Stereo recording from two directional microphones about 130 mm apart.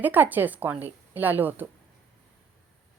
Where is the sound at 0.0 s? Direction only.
15° right (ahead or behind).